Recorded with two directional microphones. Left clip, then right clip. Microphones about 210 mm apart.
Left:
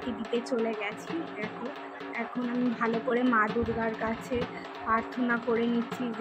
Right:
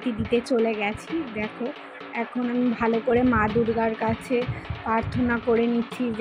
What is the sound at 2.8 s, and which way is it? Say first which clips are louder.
A woman's voice: right 7 dB; 15° right (ahead or behind).